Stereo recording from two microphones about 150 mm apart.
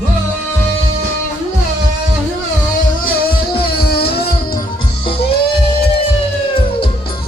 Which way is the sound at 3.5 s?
90° left.